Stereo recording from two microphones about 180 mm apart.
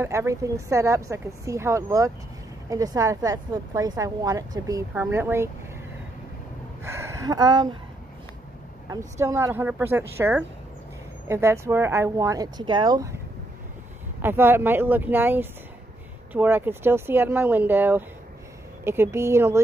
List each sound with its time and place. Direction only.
0.0 s a woman's voice: 15° right (ahead or behind)
6.8 s a sound: 15° right (ahead or behind)
8.9 s a woman's voice: 15° right (ahead or behind)
14.2 s a woman's voice: 10° right (ahead or behind)